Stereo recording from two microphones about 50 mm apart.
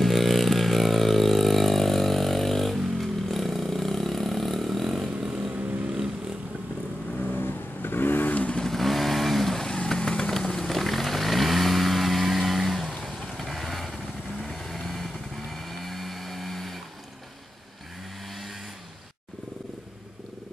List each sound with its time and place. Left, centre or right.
0.0 s vehicle: centre
7.2 s vehicle: left
8.3 s vehicle: left
8.5 s vehicle: centre